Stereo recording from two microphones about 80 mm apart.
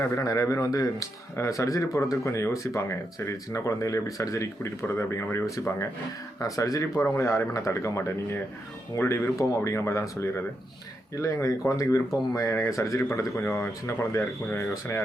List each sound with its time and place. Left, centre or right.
0.2 s speech: left